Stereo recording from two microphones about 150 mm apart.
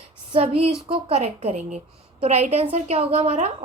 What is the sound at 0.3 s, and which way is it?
A woman's voice, 40° right (ahead or behind).